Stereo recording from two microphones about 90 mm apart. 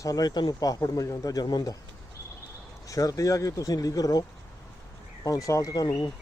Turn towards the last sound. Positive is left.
turn(degrees=45)  # may be behind; listen again after turning